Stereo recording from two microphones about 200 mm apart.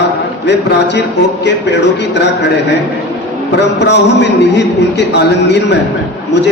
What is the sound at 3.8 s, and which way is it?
A man's voice, 60° left (ahead or behind).